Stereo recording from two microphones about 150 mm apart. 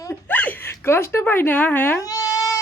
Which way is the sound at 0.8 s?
15° left (ahead or behind).